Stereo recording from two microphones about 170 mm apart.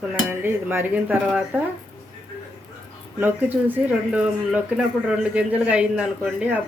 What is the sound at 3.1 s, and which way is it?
Speech, 10° right (ahead or behind).